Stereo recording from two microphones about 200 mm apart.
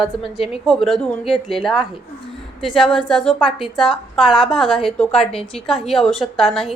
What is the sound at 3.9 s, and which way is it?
Speech, 25° left (ahead or behind).